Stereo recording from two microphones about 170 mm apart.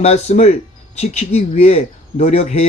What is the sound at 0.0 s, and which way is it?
A man's voice, 40° left (ahead or behind).